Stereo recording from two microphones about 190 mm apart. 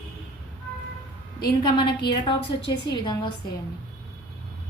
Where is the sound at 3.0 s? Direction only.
20° left (ahead or behind).